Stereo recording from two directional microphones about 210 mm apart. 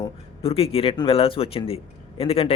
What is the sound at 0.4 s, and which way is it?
A man's voice, 30° left (ahead or behind).